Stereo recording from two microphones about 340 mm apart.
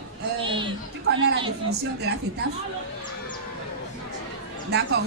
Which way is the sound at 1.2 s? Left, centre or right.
Right.